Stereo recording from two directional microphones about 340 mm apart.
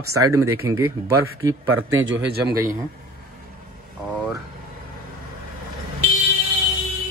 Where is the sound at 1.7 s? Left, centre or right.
Right.